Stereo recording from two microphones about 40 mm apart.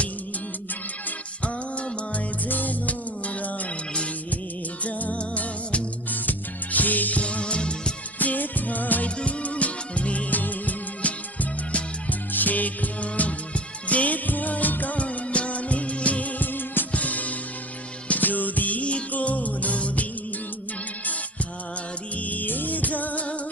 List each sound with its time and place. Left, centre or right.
1.4 s music: left
2.5 s music: left
4.8 s music: left
5.4 s music: left
8.2 s music: left
9.0 s music: left
14.9 s music of bollywood: left
16.9 s music: left
22.2 s music: left